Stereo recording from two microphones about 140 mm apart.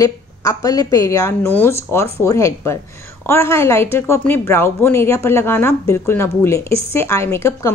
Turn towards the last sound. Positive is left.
turn(degrees=20)  # may be behind; listen again after turning